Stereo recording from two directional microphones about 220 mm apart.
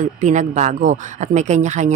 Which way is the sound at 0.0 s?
35° right (ahead or behind).